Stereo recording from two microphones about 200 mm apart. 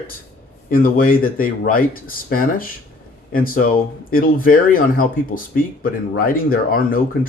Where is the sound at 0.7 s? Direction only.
45° left (ahead or behind).